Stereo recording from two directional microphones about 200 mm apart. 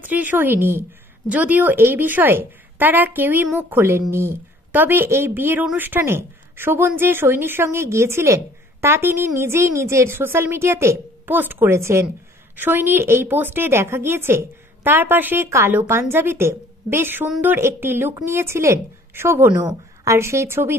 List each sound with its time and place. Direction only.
0.0 s a woman's voice: 10° right (ahead or behind)